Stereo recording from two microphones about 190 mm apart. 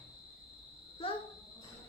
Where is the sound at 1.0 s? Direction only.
30° left (ahead or behind).